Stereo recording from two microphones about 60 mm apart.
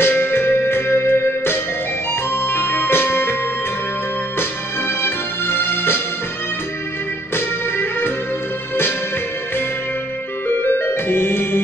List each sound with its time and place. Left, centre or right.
0.0 s music: left
4.4 s music: left
7.3 s music: left
10.6 s music: left